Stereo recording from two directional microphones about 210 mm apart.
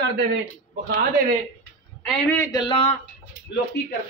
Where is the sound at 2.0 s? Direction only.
5° left (ahead or behind); by 2.9 s 25° left (ahead or behind).